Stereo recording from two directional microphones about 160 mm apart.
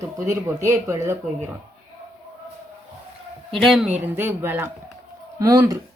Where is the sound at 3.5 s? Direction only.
Centre (ahead or behind); by 5.8 s 20° right (ahead or behind).